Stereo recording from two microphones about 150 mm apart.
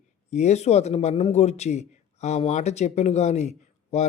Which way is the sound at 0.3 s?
50° left (ahead or behind).